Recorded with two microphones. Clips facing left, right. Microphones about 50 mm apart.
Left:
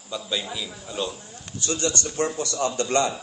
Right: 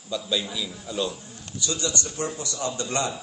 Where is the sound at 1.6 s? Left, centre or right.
Left.